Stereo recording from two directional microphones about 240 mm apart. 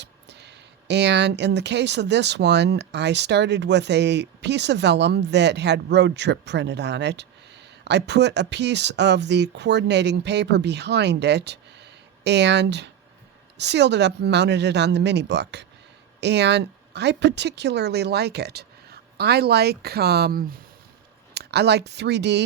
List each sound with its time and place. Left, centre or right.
0.0 s speech: right